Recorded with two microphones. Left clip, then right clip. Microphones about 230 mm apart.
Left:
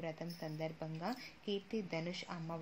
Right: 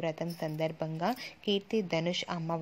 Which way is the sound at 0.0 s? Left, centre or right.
Right.